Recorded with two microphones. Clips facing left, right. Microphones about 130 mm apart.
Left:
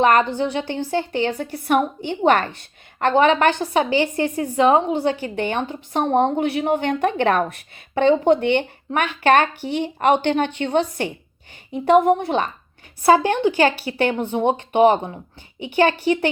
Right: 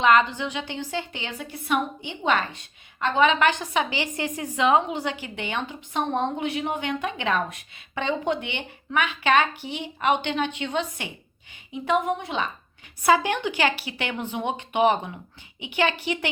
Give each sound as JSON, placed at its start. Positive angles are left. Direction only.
{"t": 0.0, "sound": "a woman's voice", "side_deg": 45}
{"t": 2.0, "sound": "a woman's voice", "side_deg": 55}
{"t": 13.0, "sound": "a woman's voice", "side_deg": 35}